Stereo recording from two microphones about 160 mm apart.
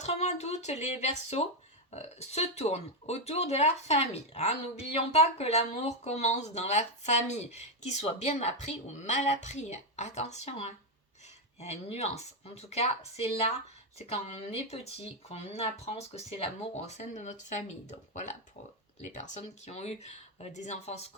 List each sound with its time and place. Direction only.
0.0 s speech: 45° left (ahead or behind)